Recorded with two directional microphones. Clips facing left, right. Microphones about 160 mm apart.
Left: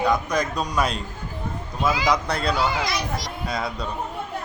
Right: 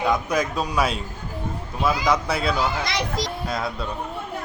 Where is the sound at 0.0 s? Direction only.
5° right (ahead or behind).